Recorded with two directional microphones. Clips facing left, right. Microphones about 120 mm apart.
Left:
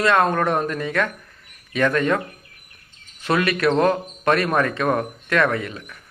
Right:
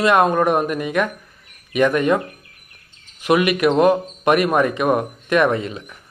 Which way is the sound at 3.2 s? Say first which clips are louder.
Right 4 dB; 15° right (ahead or behind).